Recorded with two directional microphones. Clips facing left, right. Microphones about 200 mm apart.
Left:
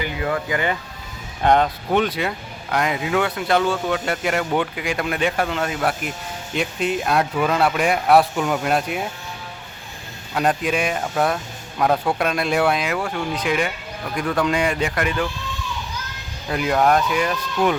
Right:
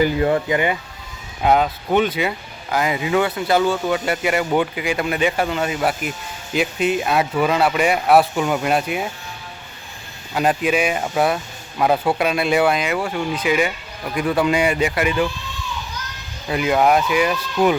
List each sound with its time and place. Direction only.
0.0 s speech: 30° right (ahead or behind)
1.4 s speech: 5° right (ahead or behind)
10.3 s speech: 5° right (ahead or behind)
16.5 s speech: 5° right (ahead or behind)